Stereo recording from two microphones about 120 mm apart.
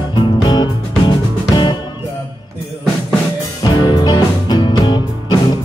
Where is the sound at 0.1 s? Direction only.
40° left (ahead or behind).